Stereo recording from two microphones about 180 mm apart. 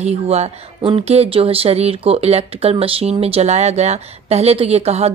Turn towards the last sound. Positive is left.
turn(degrees=-35)  # may be behind; listen again after turning